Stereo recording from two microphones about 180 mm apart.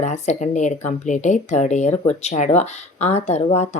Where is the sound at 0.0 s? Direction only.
40° left (ahead or behind).